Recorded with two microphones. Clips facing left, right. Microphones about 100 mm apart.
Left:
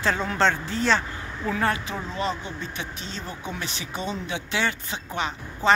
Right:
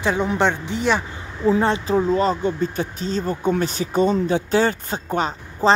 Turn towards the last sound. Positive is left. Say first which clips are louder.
# right 4 dB
turn(degrees=-40)  # may be behind; listen again after turning